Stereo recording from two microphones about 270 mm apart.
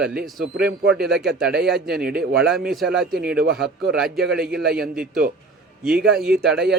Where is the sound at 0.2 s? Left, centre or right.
Right.